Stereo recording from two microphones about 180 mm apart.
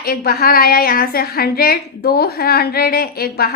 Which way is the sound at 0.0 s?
55° left (ahead or behind).